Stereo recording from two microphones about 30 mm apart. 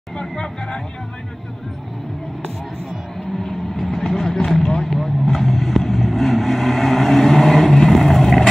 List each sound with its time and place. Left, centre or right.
0.2 s speech: left
3.7 s vehicle: centre